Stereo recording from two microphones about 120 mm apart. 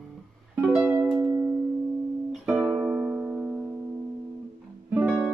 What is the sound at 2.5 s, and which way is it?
Music, 10° right (ahead or behind).